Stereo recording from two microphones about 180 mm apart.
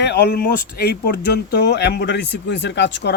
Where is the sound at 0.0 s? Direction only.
65° left (ahead or behind).